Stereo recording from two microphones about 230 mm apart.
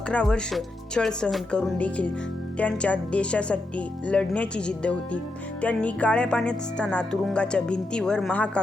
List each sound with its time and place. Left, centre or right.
0.1 s speech: centre